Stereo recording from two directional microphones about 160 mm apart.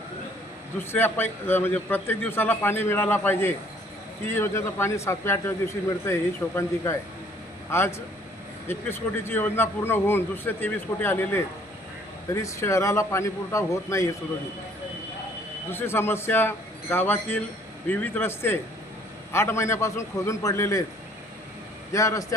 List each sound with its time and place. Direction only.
0.8 s a man's voice: 15° left (ahead or behind)
15.7 s a man's voice: 15° left (ahead or behind)
21.9 s a man's voice: 20° left (ahead or behind)